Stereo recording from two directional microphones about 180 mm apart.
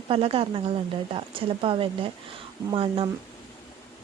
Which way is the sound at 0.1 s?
30° right (ahead or behind).